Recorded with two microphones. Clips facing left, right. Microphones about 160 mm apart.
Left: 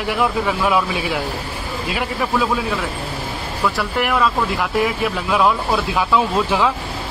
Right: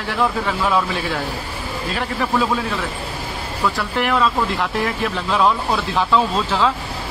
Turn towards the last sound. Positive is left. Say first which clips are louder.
# left 1 dB
turn(degrees=10)  # may be behind; listen again after turning